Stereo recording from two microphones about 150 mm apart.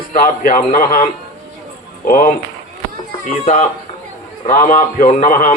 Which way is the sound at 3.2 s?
50° left (ahead or behind).